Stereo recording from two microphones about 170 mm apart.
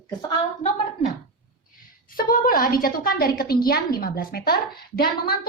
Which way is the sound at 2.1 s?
55° left (ahead or behind).